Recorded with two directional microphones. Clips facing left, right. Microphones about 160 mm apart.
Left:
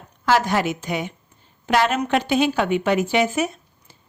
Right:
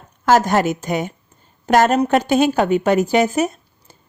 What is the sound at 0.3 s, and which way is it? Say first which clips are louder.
A woman's voice: right 4 dB; 45° right (ahead or behind).